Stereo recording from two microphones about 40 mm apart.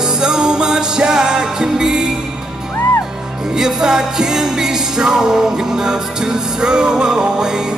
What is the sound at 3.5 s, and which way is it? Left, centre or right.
Music, centre.